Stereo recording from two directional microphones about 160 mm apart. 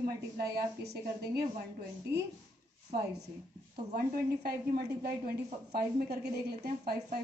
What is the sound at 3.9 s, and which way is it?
A woman's voice, 70° right (ahead or behind).